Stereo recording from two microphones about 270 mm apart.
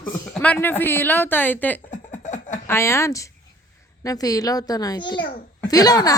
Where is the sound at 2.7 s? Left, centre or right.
Centre.